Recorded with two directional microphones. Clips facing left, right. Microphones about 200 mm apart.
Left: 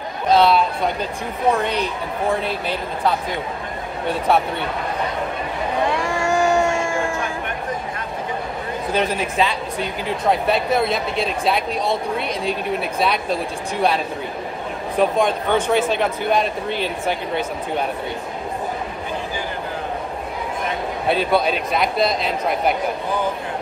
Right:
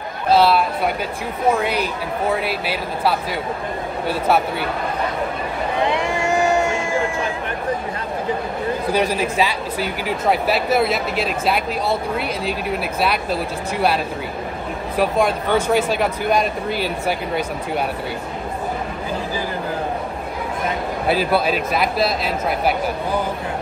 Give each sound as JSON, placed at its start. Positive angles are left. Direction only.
{"t": 0.3, "sound": "speech", "side_deg": -5}
{"t": 5.9, "sound": "vehicle", "side_deg": -20}
{"t": 8.9, "sound": "speech", "side_deg": -10}
{"t": 15.0, "sound": "speech", "side_deg": -5}
{"t": 21.1, "sound": "speech", "side_deg": -5}